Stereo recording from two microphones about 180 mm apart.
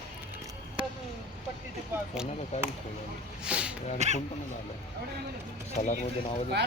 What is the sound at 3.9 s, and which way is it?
Speech, 40° right (ahead or behind).